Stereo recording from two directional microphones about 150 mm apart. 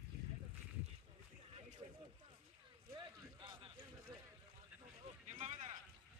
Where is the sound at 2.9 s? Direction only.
35° right (ahead or behind).